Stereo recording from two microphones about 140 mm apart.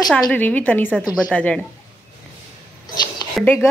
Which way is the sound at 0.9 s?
5° right (ahead or behind).